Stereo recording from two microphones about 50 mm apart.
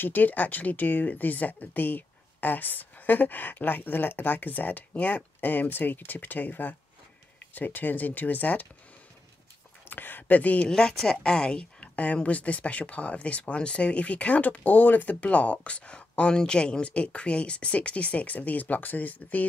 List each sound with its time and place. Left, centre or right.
0.0 s speech: left
9.8 s speech: left
10.7 s speech: centre; by 19.4 s left